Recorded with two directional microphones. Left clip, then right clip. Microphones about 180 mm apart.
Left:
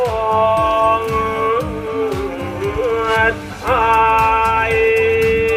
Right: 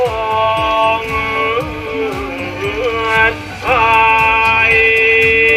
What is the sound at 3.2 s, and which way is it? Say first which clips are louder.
Music: right 3 dB; 5° right (ahead or behind).